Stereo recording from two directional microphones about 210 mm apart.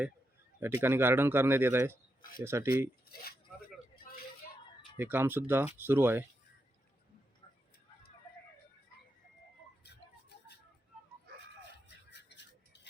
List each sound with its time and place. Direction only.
0.6 s a man's voice: 10° right (ahead or behind)
4.9 s a man's voice: 10° right (ahead or behind)
9.8 s music: 50° left (ahead or behind)
11.9 s toothbrush: 55° left (ahead or behind)